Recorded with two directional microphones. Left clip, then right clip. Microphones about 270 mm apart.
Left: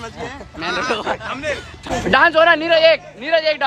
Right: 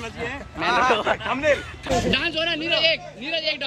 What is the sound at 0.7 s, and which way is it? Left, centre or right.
Speech, centre.